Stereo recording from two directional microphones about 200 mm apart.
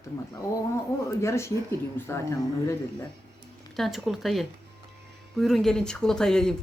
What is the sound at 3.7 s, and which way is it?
Speech, centre (ahead or behind).